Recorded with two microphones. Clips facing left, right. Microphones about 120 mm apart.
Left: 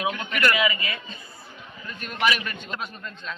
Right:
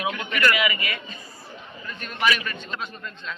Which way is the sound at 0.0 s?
30° left (ahead or behind).